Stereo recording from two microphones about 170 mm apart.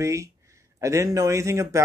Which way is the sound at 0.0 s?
20° right (ahead or behind).